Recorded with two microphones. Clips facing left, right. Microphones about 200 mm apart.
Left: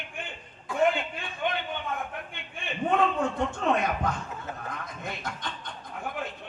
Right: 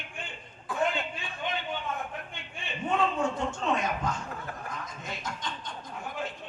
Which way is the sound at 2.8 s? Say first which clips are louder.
Left 3 dB; 60° left (ahead or behind).